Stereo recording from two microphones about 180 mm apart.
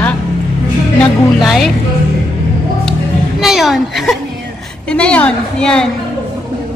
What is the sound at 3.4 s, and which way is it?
A woman's voice, centre (ahead or behind).